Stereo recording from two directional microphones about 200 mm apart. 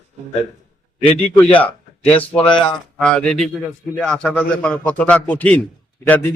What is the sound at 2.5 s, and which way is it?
Speech, 25° left (ahead or behind).